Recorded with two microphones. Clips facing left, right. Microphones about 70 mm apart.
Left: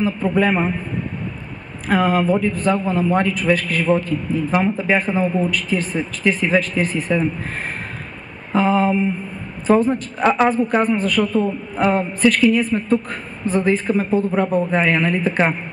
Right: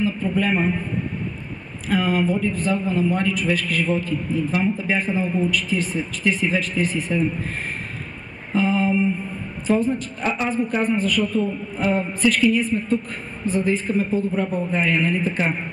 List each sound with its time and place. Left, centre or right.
0.3 s a man's voice: left
1.9 s a man's voice: left